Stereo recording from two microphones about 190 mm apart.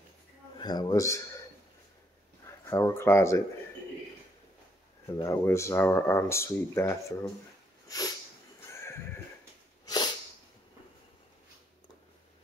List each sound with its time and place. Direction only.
0.6 s speech: 20° left (ahead or behind)
2.4 s speech: 15° left (ahead or behind)
5.2 s speech: 15° left (ahead or behind)
7.9 s sneeze: 20° left (ahead or behind)
8.7 s neigh: 15° left (ahead or behind)